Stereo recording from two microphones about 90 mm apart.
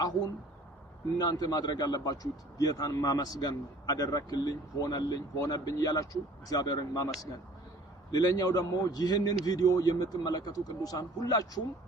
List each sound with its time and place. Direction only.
1.2 s a man's voice: 45° left (ahead or behind)
8.1 s a man's voice: 45° left (ahead or behind)